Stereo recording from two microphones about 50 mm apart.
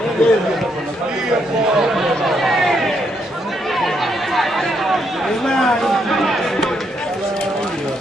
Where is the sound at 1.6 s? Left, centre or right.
Centre.